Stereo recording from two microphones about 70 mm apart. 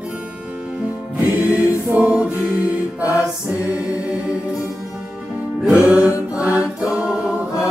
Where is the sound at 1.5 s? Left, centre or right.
Right.